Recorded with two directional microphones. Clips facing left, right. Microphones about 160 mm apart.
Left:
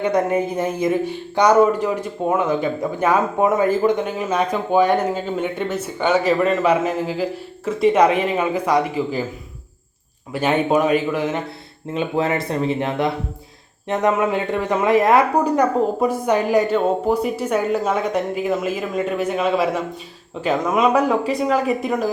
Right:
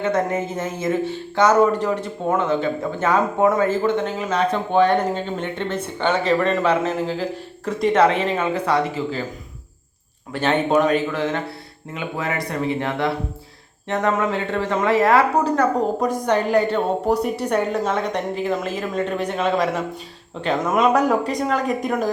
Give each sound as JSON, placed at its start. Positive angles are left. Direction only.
{"t": 0.0, "sound": "speech", "side_deg": 15}
{"t": 10.3, "sound": "speech", "side_deg": 10}
{"t": 11.9, "sound": "speech", "side_deg": 25}
{"t": 16.0, "sound": "speech", "side_deg": 5}